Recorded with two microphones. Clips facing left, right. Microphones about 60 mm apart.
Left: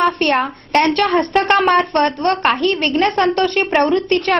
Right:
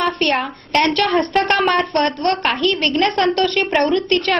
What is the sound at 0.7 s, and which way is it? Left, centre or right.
Speech, left.